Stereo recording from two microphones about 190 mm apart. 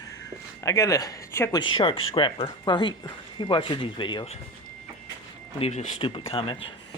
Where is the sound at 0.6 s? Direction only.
15° left (ahead or behind).